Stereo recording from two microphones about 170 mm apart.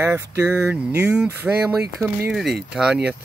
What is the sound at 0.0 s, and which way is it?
Speech, 10° right (ahead or behind).